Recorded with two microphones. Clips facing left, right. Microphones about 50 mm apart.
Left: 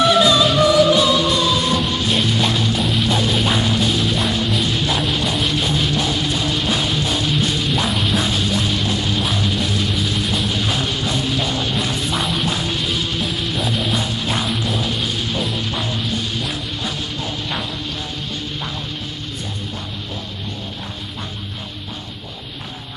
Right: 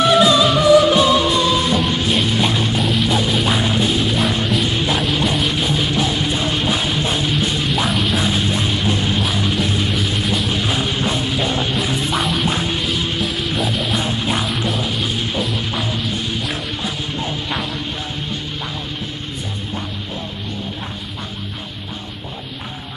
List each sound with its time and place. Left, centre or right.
0.1 s music: centre
0.9 s music: right
2.8 s music: centre
3.6 s music: centre
4.9 s music: centre
7.4 s music: centre
8.3 s music: right
9.8 s music: centre
10.5 s music: centre
12.4 s music: centre
12.8 s music: centre